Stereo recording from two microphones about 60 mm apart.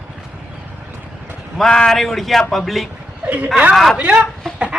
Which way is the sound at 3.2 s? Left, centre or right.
Right.